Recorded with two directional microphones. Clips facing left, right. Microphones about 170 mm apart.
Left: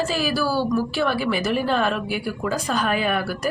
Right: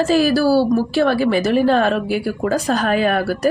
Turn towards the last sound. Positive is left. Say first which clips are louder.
# right 6 dB
turn(degrees=-40)  # may be behind; listen again after turning